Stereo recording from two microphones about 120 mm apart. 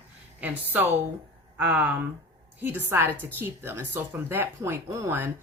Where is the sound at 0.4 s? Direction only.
15° right (ahead or behind).